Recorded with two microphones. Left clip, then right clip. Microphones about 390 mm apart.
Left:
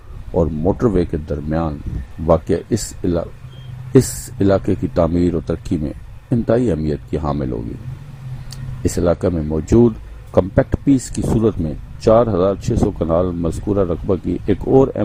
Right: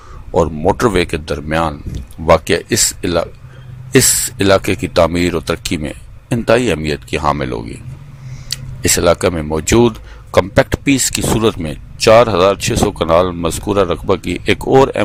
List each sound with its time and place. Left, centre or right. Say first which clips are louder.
0.3 s speech: right 5 dB; right
8.8 s speech: right 5 dB; right